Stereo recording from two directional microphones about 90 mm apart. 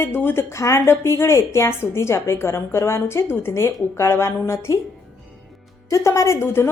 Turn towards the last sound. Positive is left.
turn(degrees=30)  # may be behind; listen again after turning